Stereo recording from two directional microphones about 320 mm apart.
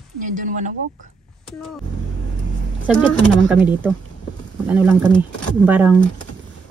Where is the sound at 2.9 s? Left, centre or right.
Centre.